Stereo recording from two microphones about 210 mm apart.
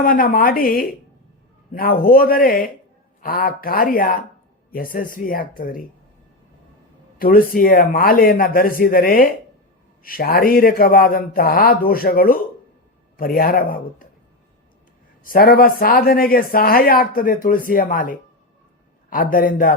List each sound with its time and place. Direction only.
0.0 s speech: 40° left (ahead or behind)
7.2 s speech: 45° left (ahead or behind)
15.2 s speech: 45° left (ahead or behind)